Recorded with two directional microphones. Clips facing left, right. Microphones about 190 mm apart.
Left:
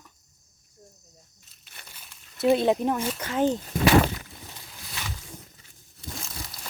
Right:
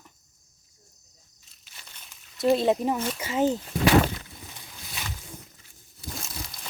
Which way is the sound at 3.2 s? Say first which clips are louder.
Even; 10° right (ahead or behind).